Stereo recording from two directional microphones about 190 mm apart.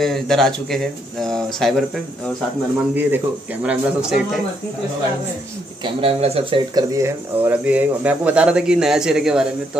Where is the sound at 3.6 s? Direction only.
5° right (ahead or behind).